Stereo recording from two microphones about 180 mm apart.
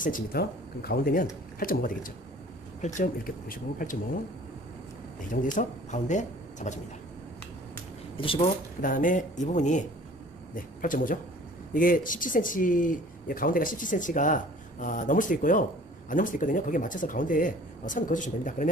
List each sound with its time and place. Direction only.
0.0 s speech: 55° left (ahead or behind)
5.3 s speech: 45° left (ahead or behind)
8.1 s speech: 30° left (ahead or behind)
8.8 s speech: 50° left (ahead or behind)